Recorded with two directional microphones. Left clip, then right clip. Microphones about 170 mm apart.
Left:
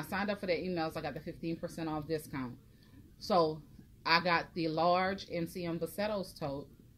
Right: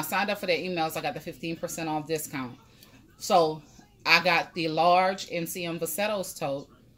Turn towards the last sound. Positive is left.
turn(degrees=-20)  # may be behind; listen again after turning